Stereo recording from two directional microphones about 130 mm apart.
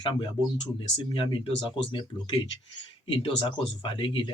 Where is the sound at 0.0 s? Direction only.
40° left (ahead or behind).